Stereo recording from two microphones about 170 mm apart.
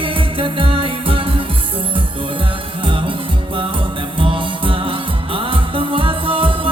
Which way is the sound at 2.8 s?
30° right (ahead or behind).